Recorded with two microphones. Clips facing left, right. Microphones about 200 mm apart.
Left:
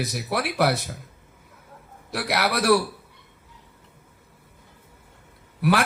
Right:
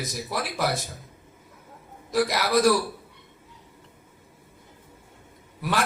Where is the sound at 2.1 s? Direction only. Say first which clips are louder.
Right 2 dB; 65° left (ahead or behind).